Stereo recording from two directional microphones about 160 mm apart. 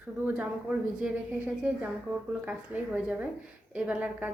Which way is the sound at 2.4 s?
10° right (ahead or behind).